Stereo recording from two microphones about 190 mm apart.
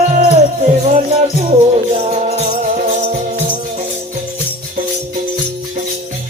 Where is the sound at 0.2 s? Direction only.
30° right (ahead or behind).